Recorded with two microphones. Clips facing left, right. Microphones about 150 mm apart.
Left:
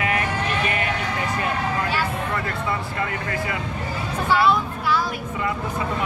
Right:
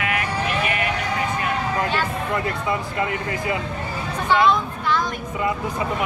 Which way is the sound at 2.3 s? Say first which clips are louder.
Right 2 dB; 20° right (ahead or behind).